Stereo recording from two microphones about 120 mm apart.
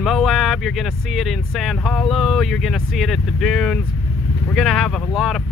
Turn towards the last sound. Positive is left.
turn(degrees=0)  # may be behind; listen again after turning